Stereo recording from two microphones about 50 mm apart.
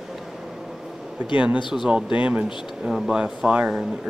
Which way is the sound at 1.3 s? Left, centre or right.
Right.